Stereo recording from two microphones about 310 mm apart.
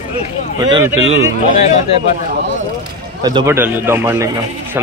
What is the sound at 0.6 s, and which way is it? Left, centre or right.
Speech, centre.